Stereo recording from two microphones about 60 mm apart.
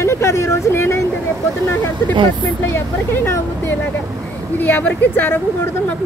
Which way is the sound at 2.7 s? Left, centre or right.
Left.